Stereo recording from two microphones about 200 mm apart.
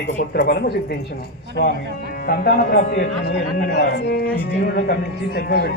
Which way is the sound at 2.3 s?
50° left (ahead or behind).